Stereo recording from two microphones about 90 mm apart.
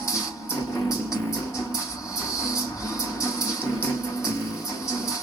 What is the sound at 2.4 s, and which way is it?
Music, 35° left (ahead or behind).